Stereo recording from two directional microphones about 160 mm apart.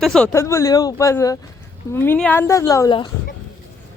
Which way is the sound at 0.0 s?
Centre (ahead or behind).